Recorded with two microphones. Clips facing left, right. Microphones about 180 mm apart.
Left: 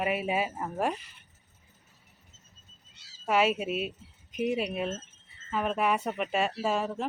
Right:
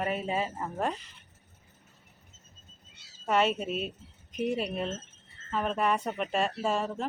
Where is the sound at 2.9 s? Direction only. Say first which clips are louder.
Right 2 dB; 55° right (ahead or behind).